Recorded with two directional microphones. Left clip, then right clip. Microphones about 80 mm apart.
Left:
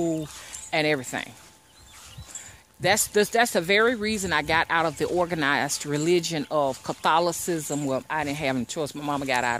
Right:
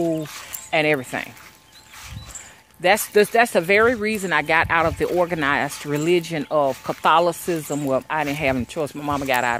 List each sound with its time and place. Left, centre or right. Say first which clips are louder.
0.7 s speech: right 5 dB; left
2.8 s speech: right 5 dB; centre
5.3 s speech: right 3 dB; left
5.7 s speech: right 3 dB; left
6.6 s speech: right 5 dB; left
8.9 s speech: right 4 dB; left